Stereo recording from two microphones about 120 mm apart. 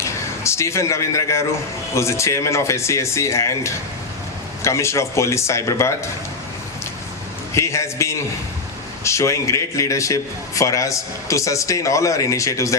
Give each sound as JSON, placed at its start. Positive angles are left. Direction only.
{"t": 0.0, "sound": "a man's voice", "side_deg": 25}
{"t": 7.5, "sound": "a man's voice", "side_deg": 25}